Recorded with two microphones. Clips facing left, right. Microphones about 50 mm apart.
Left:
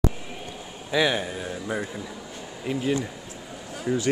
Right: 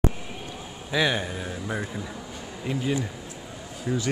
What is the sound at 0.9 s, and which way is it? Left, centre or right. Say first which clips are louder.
A man's voice: left 1 dB; centre.